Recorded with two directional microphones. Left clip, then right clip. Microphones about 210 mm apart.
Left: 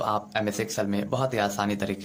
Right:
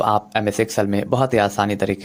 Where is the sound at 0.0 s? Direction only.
35° right (ahead or behind).